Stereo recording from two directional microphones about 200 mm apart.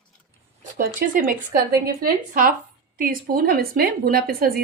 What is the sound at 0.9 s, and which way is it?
Speech, 45° right (ahead or behind).